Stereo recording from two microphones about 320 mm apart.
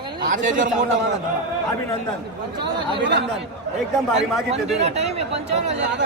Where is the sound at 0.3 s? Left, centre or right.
Right.